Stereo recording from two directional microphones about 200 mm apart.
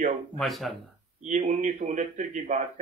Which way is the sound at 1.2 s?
35° right (ahead or behind).